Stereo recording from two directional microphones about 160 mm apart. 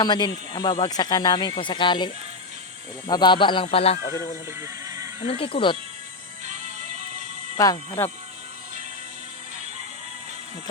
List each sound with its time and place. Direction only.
0.0 s speech: 25° left (ahead or behind)
3.1 s speech: 30° left (ahead or behind)
4.6 s music: 20° right (ahead or behind)
5.2 s speech: 35° left (ahead or behind)
6.4 s music: 50° right (ahead or behind)
7.6 s speech: 20° left (ahead or behind)